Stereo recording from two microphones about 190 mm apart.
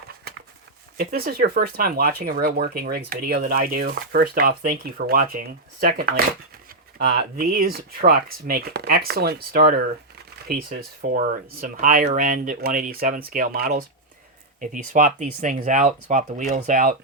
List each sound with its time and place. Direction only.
0.9 s speech: 55° right (ahead or behind)
7.0 s speech: 60° right (ahead or behind)